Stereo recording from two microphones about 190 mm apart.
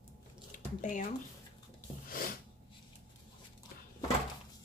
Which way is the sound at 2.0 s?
50° left (ahead or behind).